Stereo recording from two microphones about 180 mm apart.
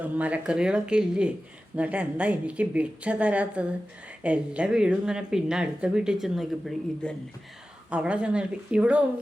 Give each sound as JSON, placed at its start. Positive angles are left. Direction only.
{"t": 0.0, "sound": "speech", "side_deg": -10}